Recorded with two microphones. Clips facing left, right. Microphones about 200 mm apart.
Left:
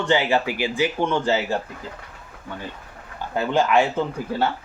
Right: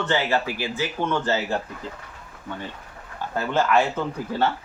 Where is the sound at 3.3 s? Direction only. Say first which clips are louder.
Left 2 dB; 15° left (ahead or behind).